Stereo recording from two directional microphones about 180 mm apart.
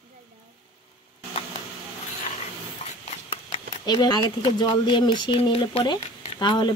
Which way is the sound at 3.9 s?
25° left (ahead or behind).